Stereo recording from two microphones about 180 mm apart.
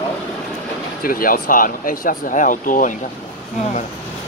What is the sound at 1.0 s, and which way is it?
Speech, 50° left (ahead or behind).